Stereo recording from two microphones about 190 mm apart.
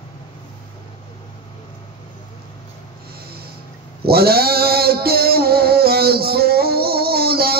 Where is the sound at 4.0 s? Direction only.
55° right (ahead or behind).